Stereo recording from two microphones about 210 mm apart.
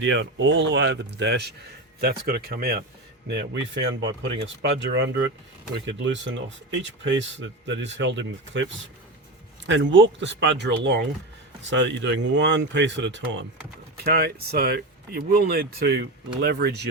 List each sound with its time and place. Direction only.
0.0 s speech: 60° right (ahead or behind); by 2.8 s 45° right (ahead or behind)
3.2 s speech: 55° right (ahead or behind)
13.9 s speech: 50° right (ahead or behind)